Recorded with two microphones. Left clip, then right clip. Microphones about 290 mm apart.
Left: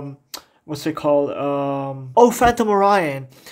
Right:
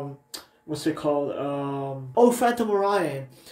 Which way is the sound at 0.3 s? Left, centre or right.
Left.